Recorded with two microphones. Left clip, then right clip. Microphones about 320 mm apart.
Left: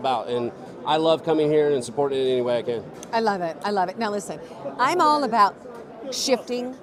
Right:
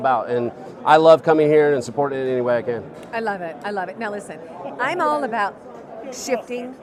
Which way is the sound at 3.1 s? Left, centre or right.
Left.